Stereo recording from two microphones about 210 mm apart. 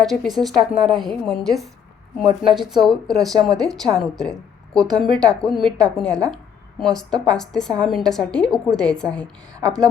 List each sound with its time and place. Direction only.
0.0 s a woman's voice: centre (ahead or behind)
2.2 s speech: 20° right (ahead or behind)
2.6 s a woman's voice: centre (ahead or behind)